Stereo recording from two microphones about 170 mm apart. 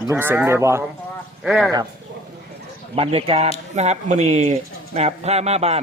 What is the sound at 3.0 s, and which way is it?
Speech, 35° right (ahead or behind).